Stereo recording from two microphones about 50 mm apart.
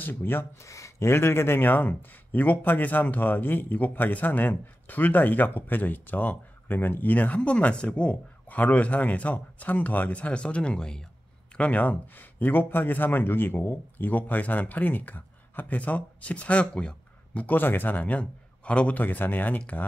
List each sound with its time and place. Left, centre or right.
0.0 s speech: left
0.6 s speech: left; by 11.1 s centre
11.5 s speech: left
12.4 s speech: left
17.6 s a man's voice: left
18.9 s speech: left